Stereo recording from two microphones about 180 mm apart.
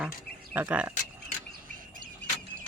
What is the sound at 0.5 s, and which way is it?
Speech, 10° right (ahead or behind).